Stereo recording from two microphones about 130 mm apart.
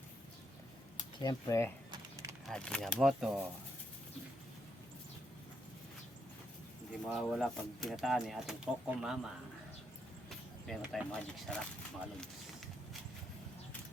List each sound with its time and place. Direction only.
1.2 s speech: 25° left (ahead or behind)
2.5 s speech: 5° left (ahead or behind)
3.0 s speech: 5° right (ahead or behind)
7.1 s speech: centre (ahead or behind)
10.2 s speech: centre (ahead or behind)